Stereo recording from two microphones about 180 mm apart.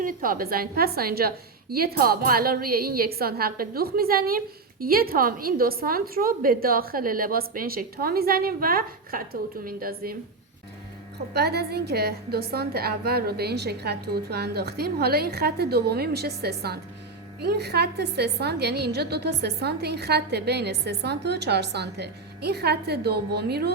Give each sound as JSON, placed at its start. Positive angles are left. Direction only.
{"t": 0.0, "sound": "a woman's voice", "side_deg": -50}
{"t": 11.3, "sound": "a woman's voice", "side_deg": -65}